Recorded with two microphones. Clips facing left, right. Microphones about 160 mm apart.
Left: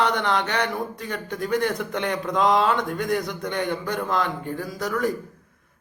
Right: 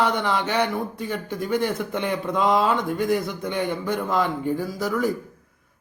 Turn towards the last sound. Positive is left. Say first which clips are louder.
# right 2 dB
turn(degrees=-5)  # may be behind; listen again after turning